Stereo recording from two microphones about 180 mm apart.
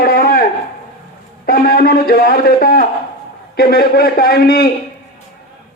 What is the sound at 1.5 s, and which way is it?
A man's voice, 55° left (ahead or behind).